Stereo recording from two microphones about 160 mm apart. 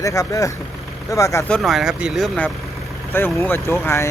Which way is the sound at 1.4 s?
5° left (ahead or behind).